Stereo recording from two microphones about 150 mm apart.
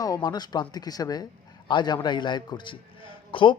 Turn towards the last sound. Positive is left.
turn(degrees=35)  # may be behind; listen again after turning